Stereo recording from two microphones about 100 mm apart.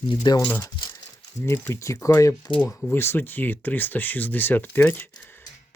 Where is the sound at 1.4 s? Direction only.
25° left (ahead or behind).